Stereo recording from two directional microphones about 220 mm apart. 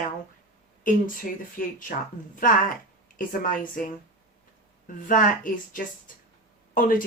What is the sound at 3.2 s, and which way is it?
Speech, 40° left (ahead or behind).